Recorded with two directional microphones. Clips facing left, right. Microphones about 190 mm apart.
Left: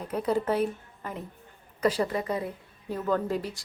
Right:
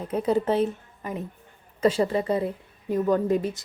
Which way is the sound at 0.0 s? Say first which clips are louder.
Right 4 dB; 20° right (ahead or behind).